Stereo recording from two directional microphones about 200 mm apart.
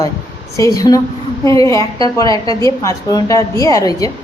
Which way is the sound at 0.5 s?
15° left (ahead or behind).